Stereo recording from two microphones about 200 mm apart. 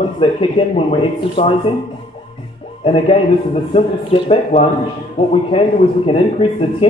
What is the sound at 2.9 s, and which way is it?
Speech, 30° left (ahead or behind).